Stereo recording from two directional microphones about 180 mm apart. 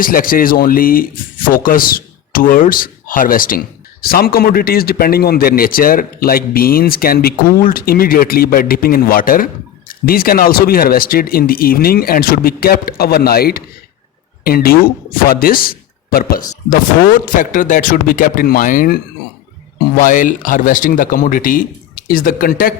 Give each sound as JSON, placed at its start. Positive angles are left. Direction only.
{"t": 0.0, "sound": "a man's voice", "side_deg": 50}
{"t": 20.0, "sound": "speech", "side_deg": 45}